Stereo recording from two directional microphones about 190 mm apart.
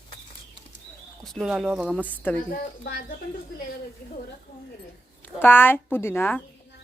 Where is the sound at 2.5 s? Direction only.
50° left (ahead or behind).